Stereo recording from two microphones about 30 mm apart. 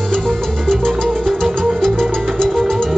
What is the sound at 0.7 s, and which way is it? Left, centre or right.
Music, centre.